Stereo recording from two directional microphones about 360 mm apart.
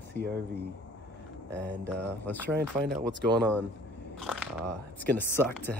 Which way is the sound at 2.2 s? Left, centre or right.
Centre.